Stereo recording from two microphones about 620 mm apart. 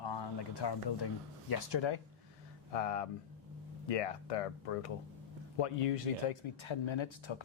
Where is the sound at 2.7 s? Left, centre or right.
Left.